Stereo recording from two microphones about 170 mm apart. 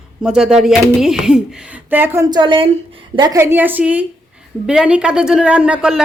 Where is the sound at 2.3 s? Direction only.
30° right (ahead or behind).